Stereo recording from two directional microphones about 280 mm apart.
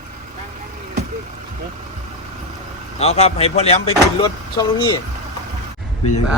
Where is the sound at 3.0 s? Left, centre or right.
Left.